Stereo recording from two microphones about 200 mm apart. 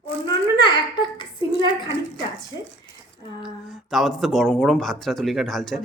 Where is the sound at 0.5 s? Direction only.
20° left (ahead or behind).